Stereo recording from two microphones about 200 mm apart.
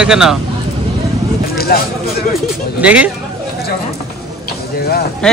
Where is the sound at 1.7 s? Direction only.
50° left (ahead or behind).